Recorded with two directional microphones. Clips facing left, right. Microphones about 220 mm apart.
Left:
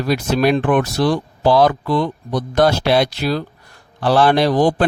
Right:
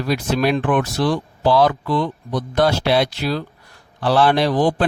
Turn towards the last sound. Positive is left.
turn(degrees=40)  # may be behind; listen again after turning